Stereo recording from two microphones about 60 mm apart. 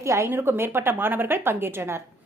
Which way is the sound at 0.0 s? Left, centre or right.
Right.